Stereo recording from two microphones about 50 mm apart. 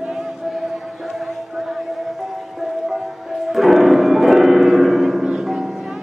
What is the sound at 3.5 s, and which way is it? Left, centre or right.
Music, centre.